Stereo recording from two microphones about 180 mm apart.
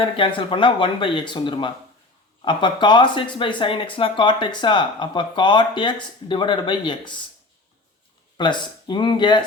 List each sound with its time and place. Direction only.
0.0 s speech: 30° left (ahead or behind)
8.4 s speech: 25° left (ahead or behind)